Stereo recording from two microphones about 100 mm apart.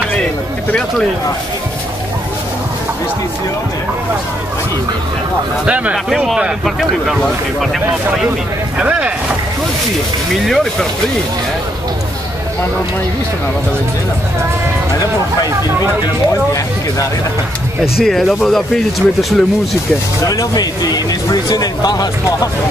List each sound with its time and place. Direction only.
0.7 s speech: 10° left (ahead or behind)
6.0 s speech: 5° right (ahead or behind)
8.7 s speech: 10° right (ahead or behind)
10.4 s speech: centre (ahead or behind)
18.0 s speech: 5° left (ahead or behind)
20.2 s speech: 40° left (ahead or behind)